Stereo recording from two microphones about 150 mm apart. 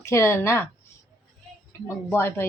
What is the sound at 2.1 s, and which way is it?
Speech, 15° left (ahead or behind).